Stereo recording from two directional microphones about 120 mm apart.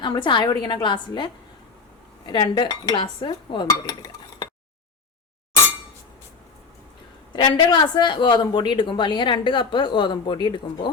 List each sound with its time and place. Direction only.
0.0 s speech: 40° left (ahead or behind)
7.3 s speech: 40° left (ahead or behind)